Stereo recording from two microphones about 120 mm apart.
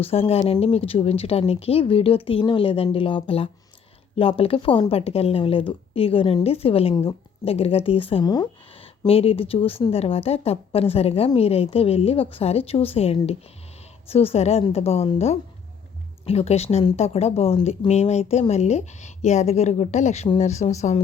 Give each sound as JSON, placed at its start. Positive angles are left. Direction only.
{"t": 0.0, "sound": "a woman's voice", "side_deg": 55}
{"t": 8.2, "sound": "speech", "side_deg": 35}
{"t": 9.0, "sound": "a woman's voice", "side_deg": 55}